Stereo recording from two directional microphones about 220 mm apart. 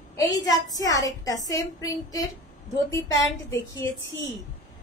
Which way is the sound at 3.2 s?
10° left (ahead or behind).